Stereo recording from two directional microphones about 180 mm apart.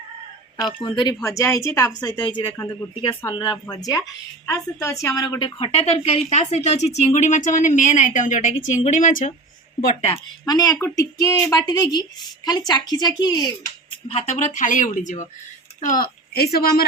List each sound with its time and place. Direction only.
0.8 s a woman's voice: 25° left (ahead or behind)
10.4 s speech: 20° left (ahead or behind)
14.1 s a woman's voice: 40° left (ahead or behind); by 16.7 s 60° left (ahead or behind)